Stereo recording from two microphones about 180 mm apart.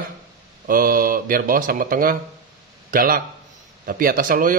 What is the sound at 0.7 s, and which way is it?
A man's voice, 50° right (ahead or behind).